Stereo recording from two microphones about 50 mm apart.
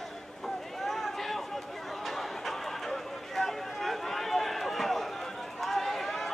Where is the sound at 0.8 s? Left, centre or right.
Centre.